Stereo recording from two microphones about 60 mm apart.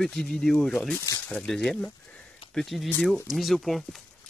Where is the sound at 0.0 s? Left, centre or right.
Centre.